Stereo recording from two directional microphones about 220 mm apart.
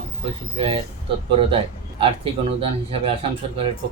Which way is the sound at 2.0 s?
25° right (ahead or behind).